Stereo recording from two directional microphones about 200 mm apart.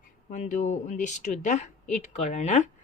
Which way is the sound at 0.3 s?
35° left (ahead or behind).